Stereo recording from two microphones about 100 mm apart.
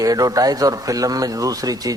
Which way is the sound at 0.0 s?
40° right (ahead or behind).